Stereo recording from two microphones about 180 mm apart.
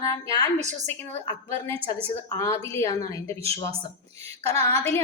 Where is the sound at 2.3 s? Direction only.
15° left (ahead or behind).